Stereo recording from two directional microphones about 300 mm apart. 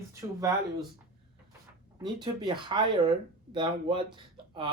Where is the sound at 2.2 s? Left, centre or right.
Centre.